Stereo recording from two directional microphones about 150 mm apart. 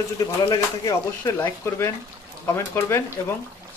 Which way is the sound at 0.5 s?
20° left (ahead or behind).